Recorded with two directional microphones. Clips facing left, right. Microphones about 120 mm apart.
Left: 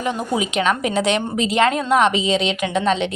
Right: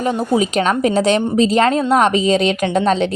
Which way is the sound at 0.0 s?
35° right (ahead or behind).